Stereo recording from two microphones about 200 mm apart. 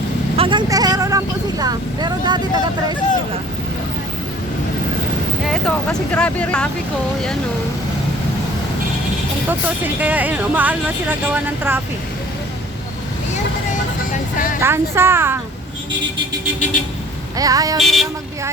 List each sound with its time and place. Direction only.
0.3 s speech: 25° right (ahead or behind)
5.5 s speech: 5° left (ahead or behind)
9.5 s speech: 10° right (ahead or behind)
14.3 s vehicle: 45° left (ahead or behind)
14.6 s speech: 10° right (ahead or behind)
17.3 s speech: 15° right (ahead or behind)
17.7 s speech: centre (ahead or behind)